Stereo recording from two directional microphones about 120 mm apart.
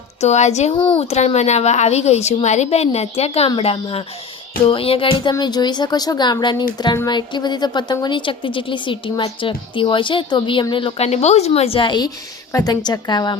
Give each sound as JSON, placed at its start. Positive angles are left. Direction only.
{"t": 0.2, "sound": "a woman's voice", "side_deg": 70}
{"t": 3.6, "sound": "music", "side_deg": 55}
{"t": 5.4, "sound": "speech", "side_deg": 35}